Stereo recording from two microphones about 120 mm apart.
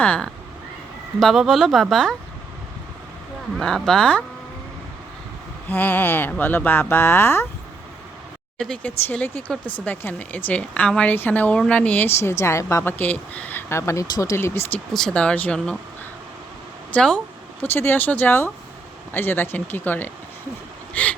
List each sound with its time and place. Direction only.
0.0 s speech: 10° left (ahead or behind)
1.2 s speech: centre (ahead or behind)
3.6 s speech: 5° left (ahead or behind)
5.6 s speech: 15° left (ahead or behind)
8.5 s a woman's voice: 5° left (ahead or behind)
14.9 s speech: 5° left (ahead or behind)
16.9 s speech: 5° left (ahead or behind)
17.6 s speech: 20° left (ahead or behind)